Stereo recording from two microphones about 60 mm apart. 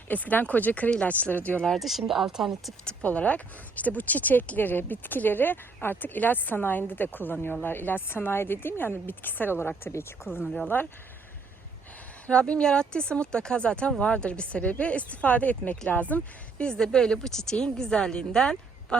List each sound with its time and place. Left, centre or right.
0.1 s speech: left
1.6 s speech: centre
3.0 s speech: left
10.4 s speech: centre
12.2 s a woman's voice: centre
16.6 s a woman's voice: centre